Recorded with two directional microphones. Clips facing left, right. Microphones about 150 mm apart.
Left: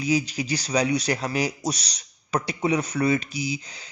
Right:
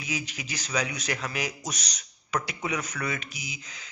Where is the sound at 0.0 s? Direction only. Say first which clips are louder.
Left 11 dB; 35° left (ahead or behind).